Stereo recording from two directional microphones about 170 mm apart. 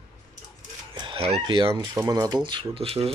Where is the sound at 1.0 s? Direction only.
30° right (ahead or behind).